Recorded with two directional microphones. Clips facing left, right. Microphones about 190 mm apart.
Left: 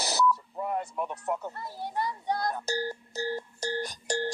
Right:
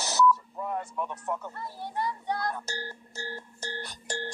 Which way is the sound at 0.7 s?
15° left (ahead or behind).